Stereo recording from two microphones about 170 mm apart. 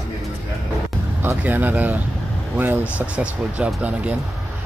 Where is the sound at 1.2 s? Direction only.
10° right (ahead or behind).